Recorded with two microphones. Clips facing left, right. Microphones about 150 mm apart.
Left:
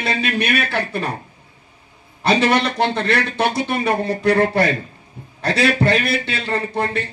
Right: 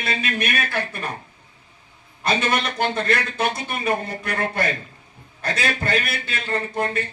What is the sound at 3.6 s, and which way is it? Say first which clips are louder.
Speech: left 5 dB; 75° left (ahead or behind).